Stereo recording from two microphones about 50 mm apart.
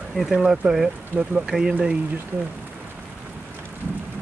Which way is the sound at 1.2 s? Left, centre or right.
Right.